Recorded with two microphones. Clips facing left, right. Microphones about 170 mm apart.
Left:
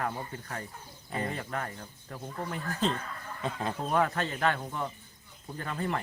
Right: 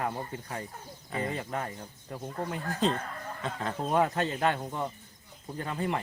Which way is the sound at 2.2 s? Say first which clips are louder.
Right 2 dB; 30° right (ahead or behind).